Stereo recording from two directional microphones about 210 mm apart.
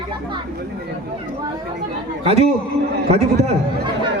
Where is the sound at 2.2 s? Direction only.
30° right (ahead or behind).